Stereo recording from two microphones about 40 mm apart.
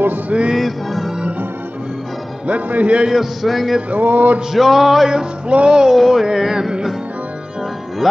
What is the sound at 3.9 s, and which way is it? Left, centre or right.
Music, right.